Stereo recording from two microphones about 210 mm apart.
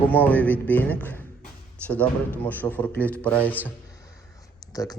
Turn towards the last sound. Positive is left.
turn(degrees=15)  # may be behind; listen again after turning